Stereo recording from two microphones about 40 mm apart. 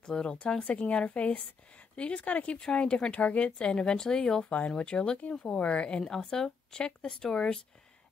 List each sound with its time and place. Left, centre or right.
0.0 s speech: left
4.5 s speech: left
6.0 s speech: centre
6.8 s speech: left